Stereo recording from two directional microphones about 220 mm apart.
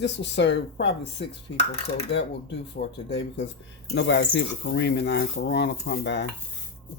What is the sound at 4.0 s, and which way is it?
Speech, 55° left (ahead or behind).